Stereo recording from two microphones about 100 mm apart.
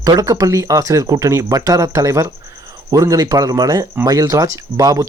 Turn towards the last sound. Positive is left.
turn(degrees=-35)  # may be behind; listen again after turning